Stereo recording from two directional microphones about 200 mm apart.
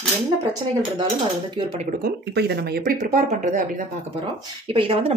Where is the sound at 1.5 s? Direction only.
30° right (ahead or behind).